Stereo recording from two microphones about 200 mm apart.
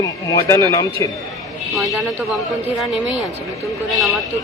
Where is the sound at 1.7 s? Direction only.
Centre (ahead or behind).